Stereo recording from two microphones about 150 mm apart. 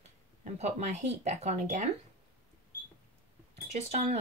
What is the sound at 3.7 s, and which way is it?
Speech, 45° right (ahead or behind).